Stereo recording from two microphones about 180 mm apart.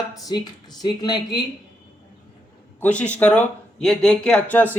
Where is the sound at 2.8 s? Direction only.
5° left (ahead or behind).